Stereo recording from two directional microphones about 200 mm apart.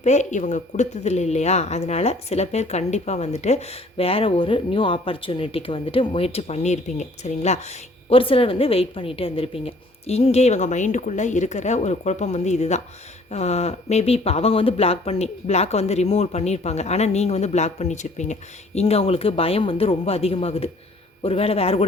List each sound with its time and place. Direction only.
0.0 s speech: 35° left (ahead or behind)